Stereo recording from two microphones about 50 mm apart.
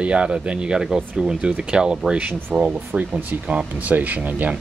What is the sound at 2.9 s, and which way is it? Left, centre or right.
Speech, right.